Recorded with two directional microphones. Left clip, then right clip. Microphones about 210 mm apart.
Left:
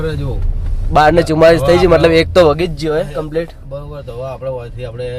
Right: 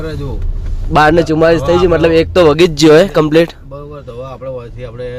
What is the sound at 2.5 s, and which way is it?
Speech, 20° right (ahead or behind).